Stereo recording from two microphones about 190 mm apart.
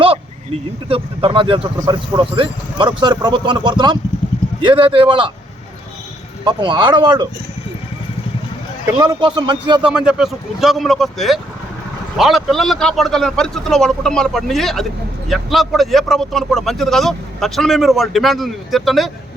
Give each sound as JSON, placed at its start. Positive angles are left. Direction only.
{"t": 0.9, "sound": "speech", "side_deg": -30}
{"t": 6.4, "sound": "speech", "side_deg": -25}
{"t": 9.0, "sound": "speech", "side_deg": -20}
{"t": 9.8, "sound": "a man's voice", "side_deg": -5}